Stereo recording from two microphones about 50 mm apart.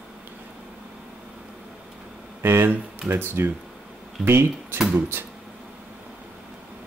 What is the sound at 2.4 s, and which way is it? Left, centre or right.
Speech, right.